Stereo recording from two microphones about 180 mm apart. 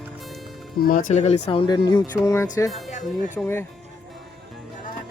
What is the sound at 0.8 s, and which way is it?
Speech, 50° left (ahead or behind).